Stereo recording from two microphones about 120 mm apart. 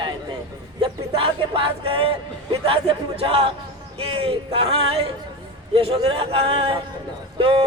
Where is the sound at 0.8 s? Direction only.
50° right (ahead or behind).